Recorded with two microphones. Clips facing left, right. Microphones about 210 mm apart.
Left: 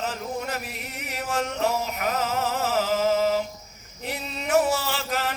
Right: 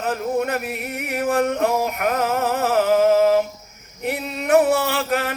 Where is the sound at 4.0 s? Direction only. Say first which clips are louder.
Right 7 dB; 60° right (ahead or behind).